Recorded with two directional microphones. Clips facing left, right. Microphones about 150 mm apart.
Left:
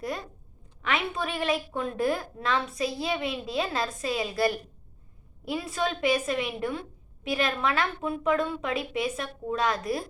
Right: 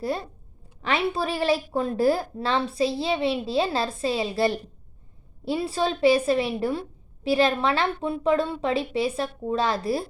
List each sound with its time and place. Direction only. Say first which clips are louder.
0.8 s a woman's voice: right 4 dB; 30° right (ahead or behind)